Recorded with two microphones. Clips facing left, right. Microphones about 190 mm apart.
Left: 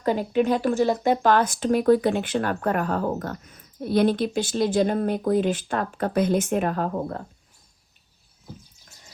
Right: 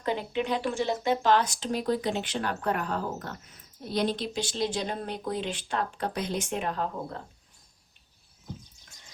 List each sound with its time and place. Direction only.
0.0 s speech: 45° left (ahead or behind)